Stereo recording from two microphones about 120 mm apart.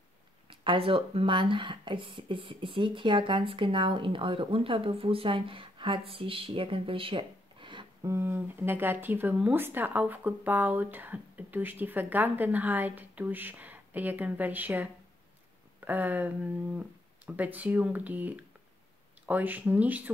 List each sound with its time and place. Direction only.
0.5 s speech: 45° right (ahead or behind)
8.0 s speech: 20° right (ahead or behind)